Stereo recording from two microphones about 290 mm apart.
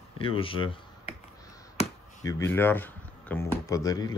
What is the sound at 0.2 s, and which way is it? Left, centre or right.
Speech, centre.